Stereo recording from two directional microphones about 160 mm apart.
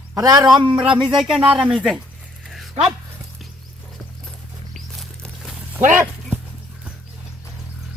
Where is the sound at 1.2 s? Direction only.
Centre (ahead or behind).